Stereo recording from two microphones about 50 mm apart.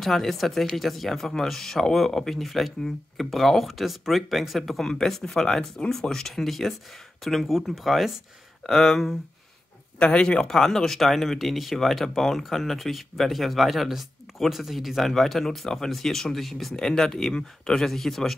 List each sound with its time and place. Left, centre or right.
0.0 s speech: centre
9.9 s speech: left
10.2 s speech: centre